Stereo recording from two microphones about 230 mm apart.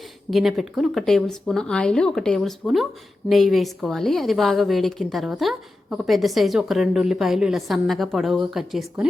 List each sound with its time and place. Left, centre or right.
0.3 s a woman's voice: centre